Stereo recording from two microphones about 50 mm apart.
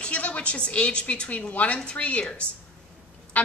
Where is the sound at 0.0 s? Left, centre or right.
Left.